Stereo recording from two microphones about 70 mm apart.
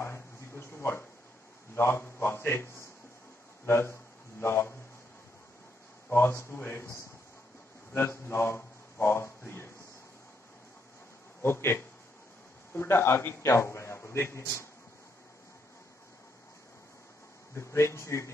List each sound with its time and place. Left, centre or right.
0.0 s a sound: left
1.8 s a man's voice: left
6.0 s a man's voice: left
11.4 s a man's voice: left
17.6 s a man's voice: left